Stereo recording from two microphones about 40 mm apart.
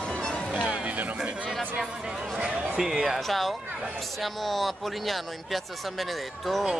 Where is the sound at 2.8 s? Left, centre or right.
Centre.